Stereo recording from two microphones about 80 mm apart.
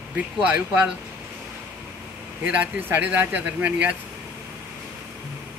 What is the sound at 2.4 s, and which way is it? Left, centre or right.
Speech, centre.